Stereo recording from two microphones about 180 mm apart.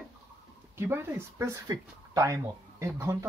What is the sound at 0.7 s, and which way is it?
Speech, 10° right (ahead or behind).